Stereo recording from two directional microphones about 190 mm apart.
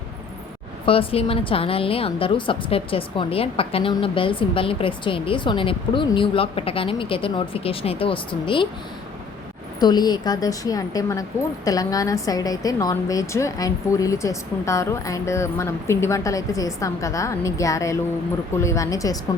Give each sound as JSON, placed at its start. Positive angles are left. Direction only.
{"t": 0.9, "sound": "a woman's voice", "side_deg": 30}
{"t": 9.8, "sound": "speech", "side_deg": 20}